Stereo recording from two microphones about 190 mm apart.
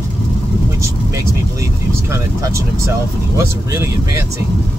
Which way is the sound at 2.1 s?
15° right (ahead or behind).